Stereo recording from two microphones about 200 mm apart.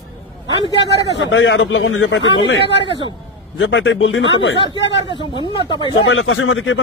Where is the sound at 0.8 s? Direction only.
70° left (ahead or behind).